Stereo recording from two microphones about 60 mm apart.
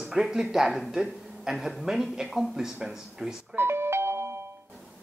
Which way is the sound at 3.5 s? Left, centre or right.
Right.